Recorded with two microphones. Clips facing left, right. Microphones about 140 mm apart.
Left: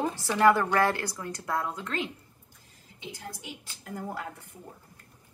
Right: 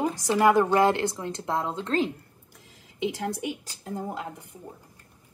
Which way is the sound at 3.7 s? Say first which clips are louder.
Right 5 dB; 30° right (ahead or behind).